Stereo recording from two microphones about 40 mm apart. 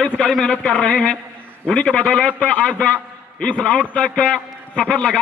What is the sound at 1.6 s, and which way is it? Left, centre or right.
Speech, centre.